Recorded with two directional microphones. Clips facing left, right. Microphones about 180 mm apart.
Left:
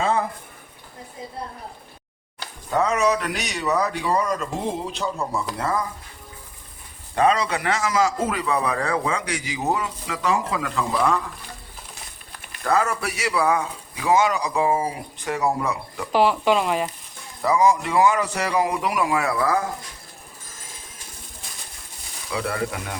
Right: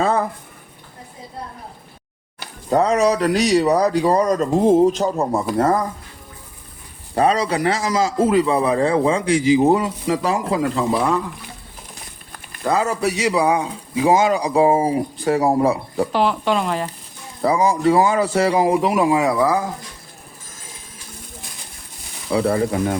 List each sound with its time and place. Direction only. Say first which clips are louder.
0.0 s a sound: right 4 dB; 40° right (ahead or behind)
2.6 s a man's voice: right 5 dB; 35° right (ahead or behind)
7.2 s a man's voice: right 3 dB; 35° right (ahead or behind)
12.6 s a man's voice: right 3 dB; 15° right (ahead or behind); by 16.0 s 35° right (ahead or behind)
16.1 s speech: left 2 dB; 5° left (ahead or behind)
17.4 s speech: right 3 dB; 30° right (ahead or behind)
22.3 s a man's voice: right 8 dB; 30° right (ahead or behind)